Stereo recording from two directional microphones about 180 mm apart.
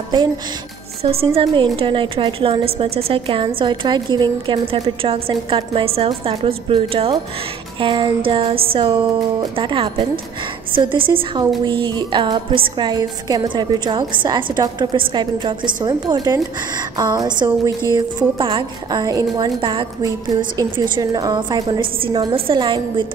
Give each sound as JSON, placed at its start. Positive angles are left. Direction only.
{"t": 1.0, "sound": "a woman's voice", "side_deg": -30}